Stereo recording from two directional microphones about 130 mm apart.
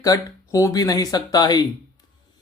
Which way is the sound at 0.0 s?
25° left (ahead or behind).